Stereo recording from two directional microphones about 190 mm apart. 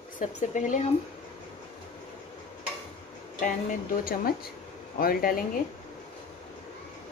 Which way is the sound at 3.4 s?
50° left (ahead or behind).